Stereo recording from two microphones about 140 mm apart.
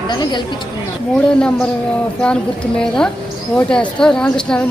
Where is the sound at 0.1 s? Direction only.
35° left (ahead or behind).